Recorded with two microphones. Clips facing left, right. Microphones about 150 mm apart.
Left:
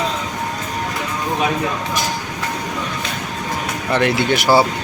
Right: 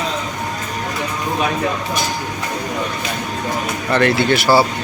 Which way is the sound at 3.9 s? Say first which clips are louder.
Right 2 dB; 15° left (ahead or behind).